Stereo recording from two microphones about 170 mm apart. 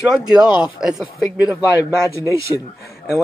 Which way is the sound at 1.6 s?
20° left (ahead or behind).